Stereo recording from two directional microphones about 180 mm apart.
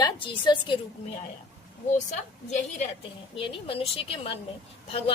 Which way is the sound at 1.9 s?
40° left (ahead or behind).